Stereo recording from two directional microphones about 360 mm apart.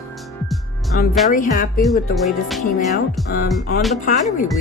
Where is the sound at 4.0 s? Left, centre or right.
Left.